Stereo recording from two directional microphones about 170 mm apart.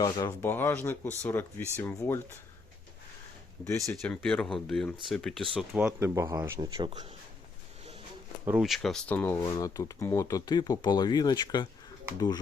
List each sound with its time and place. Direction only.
0.0 s speech: 20° left (ahead or behind)
3.8 s speech: 5° left (ahead or behind)
6.0 s speech: 20° right (ahead or behind)
8.4 s speech: 5° right (ahead or behind); by 11.7 s 25° left (ahead or behind)